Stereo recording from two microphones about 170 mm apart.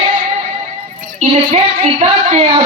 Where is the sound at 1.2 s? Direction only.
40° right (ahead or behind).